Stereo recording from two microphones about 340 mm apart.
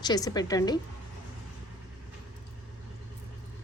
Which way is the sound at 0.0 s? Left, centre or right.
Centre.